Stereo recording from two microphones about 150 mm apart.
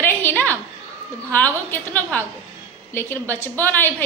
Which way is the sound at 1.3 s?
15° left (ahead or behind).